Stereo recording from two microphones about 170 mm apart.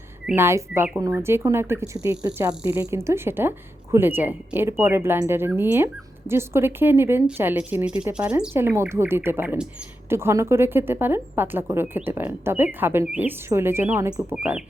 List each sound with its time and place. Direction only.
0.3 s speech: 15° right (ahead or behind)
14.3 s speech: 5° right (ahead or behind)